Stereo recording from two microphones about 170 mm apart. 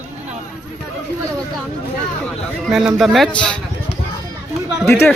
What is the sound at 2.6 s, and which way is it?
Speech, centre (ahead or behind).